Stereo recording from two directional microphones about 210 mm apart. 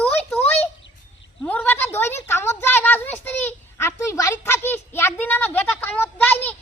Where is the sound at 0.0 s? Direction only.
5° left (ahead or behind).